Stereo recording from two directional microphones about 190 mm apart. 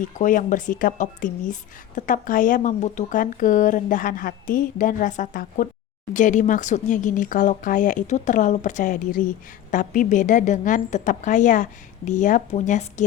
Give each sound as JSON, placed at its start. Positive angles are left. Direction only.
{"t": 0.2, "sound": "speech", "side_deg": 45}